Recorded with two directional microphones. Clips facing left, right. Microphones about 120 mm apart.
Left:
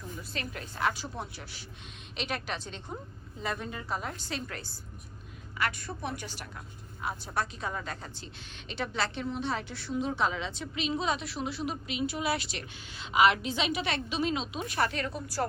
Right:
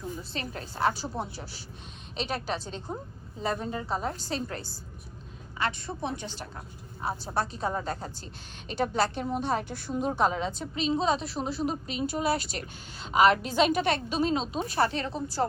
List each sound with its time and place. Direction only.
0.2 s a woman's voice: 35° right (ahead or behind)